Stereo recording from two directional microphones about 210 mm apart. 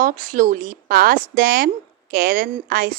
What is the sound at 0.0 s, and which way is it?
Speech, 40° right (ahead or behind).